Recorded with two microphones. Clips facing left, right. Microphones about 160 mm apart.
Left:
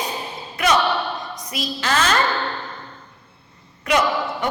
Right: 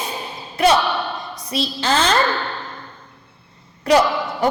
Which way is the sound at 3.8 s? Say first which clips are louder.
Right 4 dB; 35° right (ahead or behind).